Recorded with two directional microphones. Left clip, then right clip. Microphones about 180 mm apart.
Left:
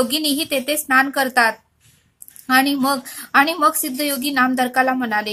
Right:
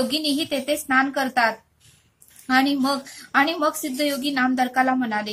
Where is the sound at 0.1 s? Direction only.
25° left (ahead or behind).